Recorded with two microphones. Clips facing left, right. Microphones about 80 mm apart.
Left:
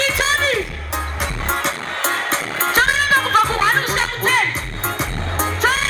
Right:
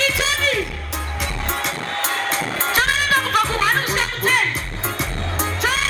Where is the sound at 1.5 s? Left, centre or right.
Left.